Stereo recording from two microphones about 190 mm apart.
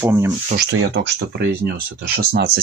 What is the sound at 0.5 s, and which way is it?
Speech, 65° right (ahead or behind).